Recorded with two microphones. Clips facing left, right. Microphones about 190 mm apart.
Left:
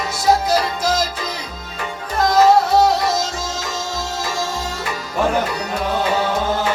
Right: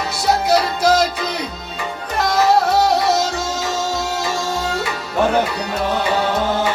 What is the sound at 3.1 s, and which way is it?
Music, 65° right (ahead or behind).